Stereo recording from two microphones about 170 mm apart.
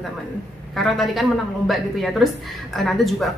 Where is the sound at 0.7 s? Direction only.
Centre (ahead or behind).